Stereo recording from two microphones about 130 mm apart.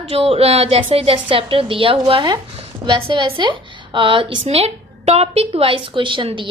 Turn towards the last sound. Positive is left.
turn(degrees=-40)  # may be behind; listen again after turning